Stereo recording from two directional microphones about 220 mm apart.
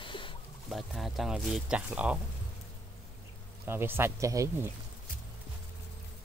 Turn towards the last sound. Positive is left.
turn(degrees=-10)  # may be behind; listen again after turning